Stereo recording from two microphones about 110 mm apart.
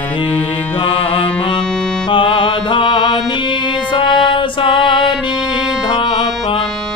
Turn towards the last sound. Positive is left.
turn(degrees=50)  # may be behind; listen again after turning